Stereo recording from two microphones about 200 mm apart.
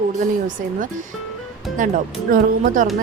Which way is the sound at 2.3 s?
40° right (ahead or behind).